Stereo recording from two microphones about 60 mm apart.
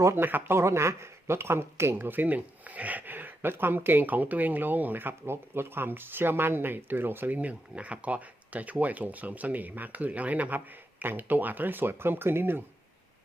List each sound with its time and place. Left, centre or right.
0.2 s speech: right
0.5 s speech: right